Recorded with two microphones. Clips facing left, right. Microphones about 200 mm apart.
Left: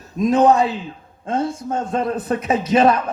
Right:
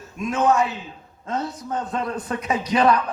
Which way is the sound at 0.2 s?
35° left (ahead or behind).